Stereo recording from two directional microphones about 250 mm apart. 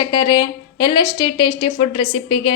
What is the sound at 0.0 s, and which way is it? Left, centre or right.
A woman's voice, centre.